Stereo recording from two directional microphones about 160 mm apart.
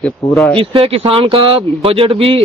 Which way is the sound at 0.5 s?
35° right (ahead or behind).